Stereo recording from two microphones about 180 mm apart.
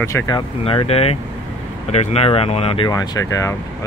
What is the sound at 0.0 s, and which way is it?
Speech, 20° left (ahead or behind).